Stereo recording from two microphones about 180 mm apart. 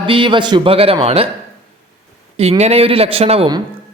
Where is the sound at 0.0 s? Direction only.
30° right (ahead or behind).